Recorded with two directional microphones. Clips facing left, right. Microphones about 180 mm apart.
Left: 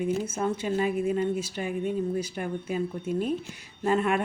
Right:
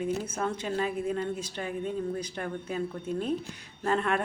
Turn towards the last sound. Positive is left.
turn(degrees=10)  # may be behind; listen again after turning